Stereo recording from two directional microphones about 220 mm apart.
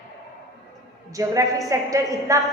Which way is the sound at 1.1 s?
15° right (ahead or behind).